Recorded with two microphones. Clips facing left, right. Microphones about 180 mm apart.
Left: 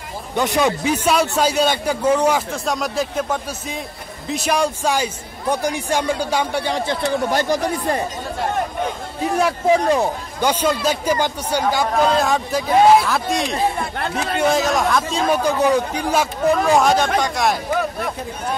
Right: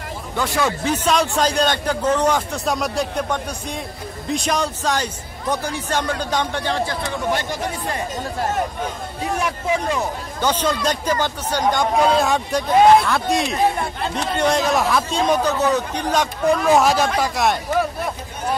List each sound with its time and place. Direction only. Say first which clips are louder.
0.4 s a man's voice: left 3 dB; 20° left (ahead or behind)
9.7 s speech: left 6 dB; 35° left (ahead or behind)
10.4 s a man's voice: left 2 dB; 10° left (ahead or behind)
11.7 s speech: right 1 dB; centre (ahead or behind)